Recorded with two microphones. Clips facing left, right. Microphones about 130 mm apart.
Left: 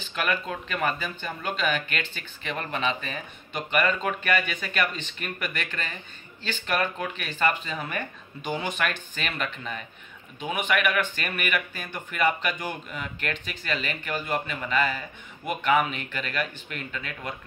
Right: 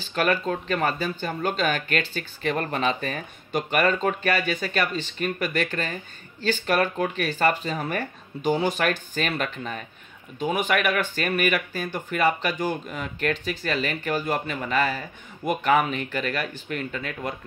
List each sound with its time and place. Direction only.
0.0 s speech: 35° right (ahead or behind)